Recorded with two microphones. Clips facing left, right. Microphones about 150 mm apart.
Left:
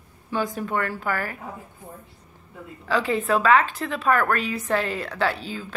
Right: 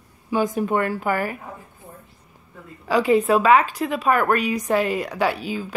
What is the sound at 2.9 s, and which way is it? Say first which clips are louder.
A woman's voice: right 5 dB; 15° right (ahead or behind).